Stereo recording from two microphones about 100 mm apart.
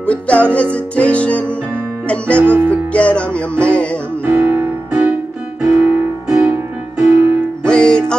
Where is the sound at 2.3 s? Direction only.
20° right (ahead or behind).